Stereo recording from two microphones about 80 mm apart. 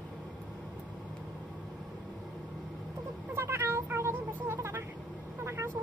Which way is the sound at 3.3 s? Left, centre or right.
Right.